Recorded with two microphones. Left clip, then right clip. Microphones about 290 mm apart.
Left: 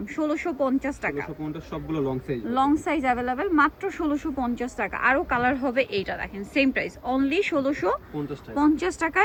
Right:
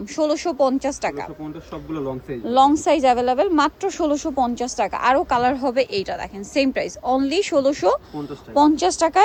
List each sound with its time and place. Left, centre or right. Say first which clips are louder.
0.2 s a woman's voice: right 7 dB; centre
2.5 s a woman's voice: right 8 dB; right